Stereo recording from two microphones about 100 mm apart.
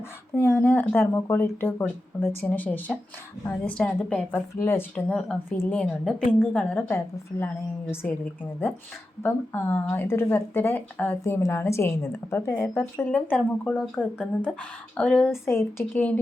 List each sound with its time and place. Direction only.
0.3 s speech: 20° left (ahead or behind)
4.9 s a woman's voice: 10° left (ahead or behind)
5.5 s speech: 20° left (ahead or behind)
5.8 s a woman's voice: 10° left (ahead or behind)
6.7 s speech: 20° left (ahead or behind)
9.2 s speech: 20° left (ahead or behind)
11.2 s a woman's voice: 30° left (ahead or behind); by 15.3 s 10° left (ahead or behind)
15.4 s a woman's voice: 25° left (ahead or behind)